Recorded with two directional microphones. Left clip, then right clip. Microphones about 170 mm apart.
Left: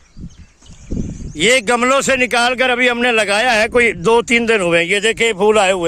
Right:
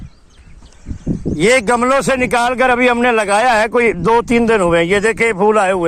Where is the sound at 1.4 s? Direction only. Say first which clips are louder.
Right 1 dB; 10° left (ahead or behind).